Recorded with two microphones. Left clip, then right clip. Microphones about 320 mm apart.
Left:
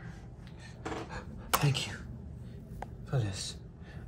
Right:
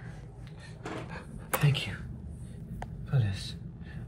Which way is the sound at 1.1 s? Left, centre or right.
Centre.